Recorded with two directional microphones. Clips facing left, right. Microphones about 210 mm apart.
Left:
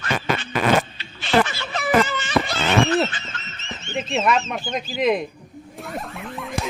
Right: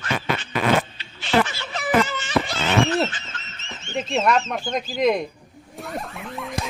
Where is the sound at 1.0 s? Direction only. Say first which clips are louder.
Left 1 dB; 65° left (ahead or behind).